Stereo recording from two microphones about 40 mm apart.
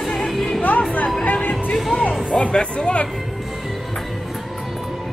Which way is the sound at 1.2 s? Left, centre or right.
Left.